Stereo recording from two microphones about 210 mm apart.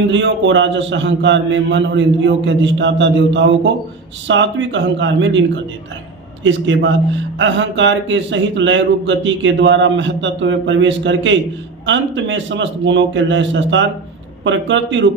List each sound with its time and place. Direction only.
0.1 s a man's voice: 60° right (ahead or behind)
6.4 s a man's voice: 60° right (ahead or behind)